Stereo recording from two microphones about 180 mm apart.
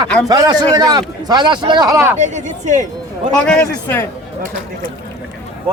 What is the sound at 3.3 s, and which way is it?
Speech, 5° left (ahead or behind).